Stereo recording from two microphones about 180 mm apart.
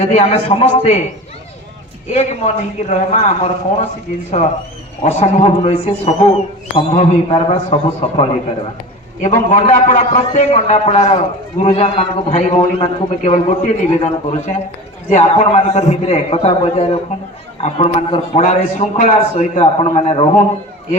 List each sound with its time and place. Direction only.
0.0 s a man's voice: 35° left (ahead or behind)
2.1 s a man's voice: 35° left (ahead or behind)